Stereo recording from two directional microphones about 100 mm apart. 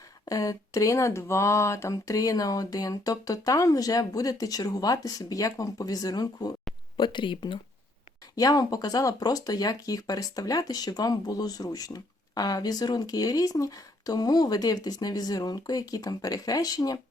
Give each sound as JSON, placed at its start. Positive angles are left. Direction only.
{"t": 0.3, "sound": "speech", "side_deg": 35}
{"t": 6.9, "sound": "speech", "side_deg": 55}
{"t": 8.4, "sound": "speech", "side_deg": 40}